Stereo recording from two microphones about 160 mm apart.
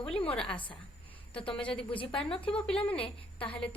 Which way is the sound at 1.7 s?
35° left (ahead or behind).